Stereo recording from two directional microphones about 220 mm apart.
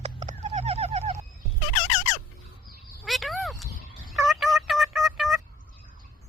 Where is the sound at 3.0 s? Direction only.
Centre (ahead or behind).